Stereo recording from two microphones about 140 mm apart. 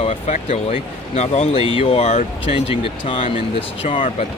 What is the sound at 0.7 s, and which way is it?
Speech, 50° left (ahead or behind).